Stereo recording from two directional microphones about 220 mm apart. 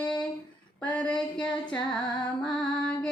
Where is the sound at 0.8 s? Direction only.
5° left (ahead or behind).